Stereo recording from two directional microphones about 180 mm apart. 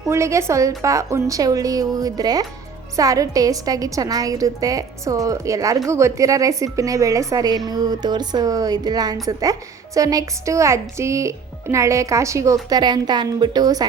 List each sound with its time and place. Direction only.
0.1 s a woman's voice: 15° right (ahead or behind)